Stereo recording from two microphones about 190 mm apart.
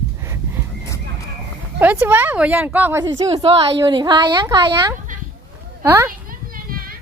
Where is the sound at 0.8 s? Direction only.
15° left (ahead or behind).